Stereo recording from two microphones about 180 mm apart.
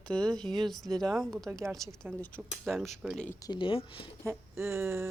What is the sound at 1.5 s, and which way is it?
Speech, 15° right (ahead or behind).